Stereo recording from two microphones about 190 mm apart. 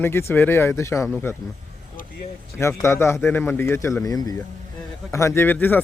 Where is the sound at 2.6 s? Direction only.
15° left (ahead or behind).